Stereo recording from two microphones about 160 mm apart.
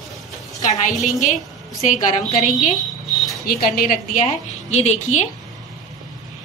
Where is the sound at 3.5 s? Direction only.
65° left (ahead or behind).